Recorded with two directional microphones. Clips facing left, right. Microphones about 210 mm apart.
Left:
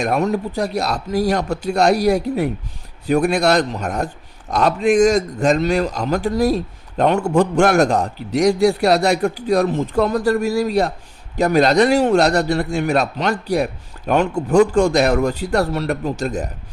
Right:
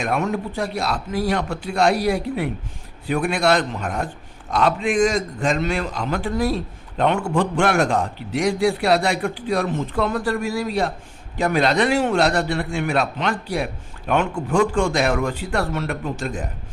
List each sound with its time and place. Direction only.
0.0 s a man's voice: 40° left (ahead or behind)